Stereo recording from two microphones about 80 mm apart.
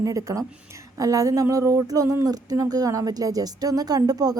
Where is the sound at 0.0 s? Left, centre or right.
Right.